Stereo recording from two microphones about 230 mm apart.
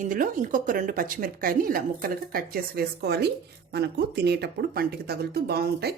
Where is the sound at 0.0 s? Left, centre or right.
Right.